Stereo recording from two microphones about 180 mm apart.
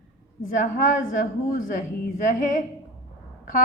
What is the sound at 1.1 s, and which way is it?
A woman's voice, 50° left (ahead or behind).